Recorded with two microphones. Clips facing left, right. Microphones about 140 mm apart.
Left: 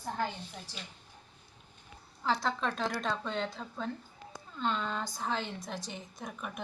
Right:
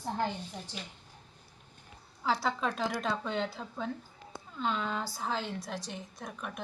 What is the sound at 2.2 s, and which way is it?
A woman's voice, 5° right (ahead or behind).